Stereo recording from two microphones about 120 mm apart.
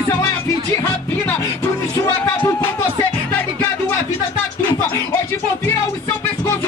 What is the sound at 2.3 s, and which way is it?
Music, 25° left (ahead or behind).